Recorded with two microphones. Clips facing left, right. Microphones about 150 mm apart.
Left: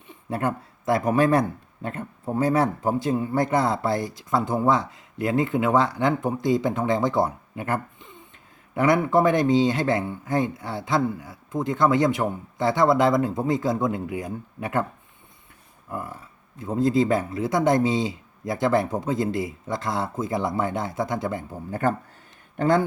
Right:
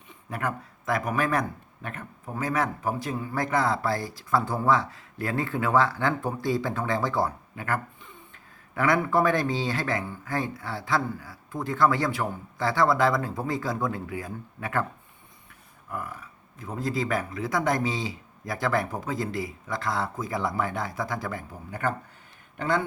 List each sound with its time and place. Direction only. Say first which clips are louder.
0.3 s speech: left 5 dB; 30° left (ahead or behind)
15.9 s speech: left 2 dB; 25° left (ahead or behind)
21.7 s speech: left 5 dB; 40° left (ahead or behind)